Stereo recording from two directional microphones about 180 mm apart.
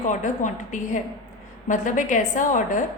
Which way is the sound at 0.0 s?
45° left (ahead or behind).